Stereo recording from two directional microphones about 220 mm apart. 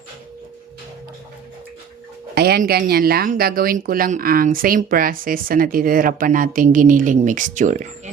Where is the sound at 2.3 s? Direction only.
45° right (ahead or behind).